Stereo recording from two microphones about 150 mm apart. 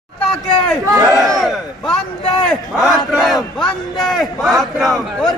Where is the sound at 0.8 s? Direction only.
25° right (ahead or behind).